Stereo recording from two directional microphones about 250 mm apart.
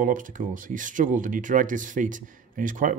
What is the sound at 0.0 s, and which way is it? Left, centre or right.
Speech, right.